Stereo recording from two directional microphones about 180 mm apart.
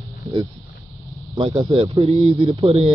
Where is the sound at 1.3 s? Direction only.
30° right (ahead or behind).